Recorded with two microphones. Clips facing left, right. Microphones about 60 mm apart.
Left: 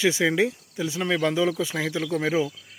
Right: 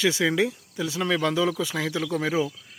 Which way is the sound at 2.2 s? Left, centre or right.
Centre.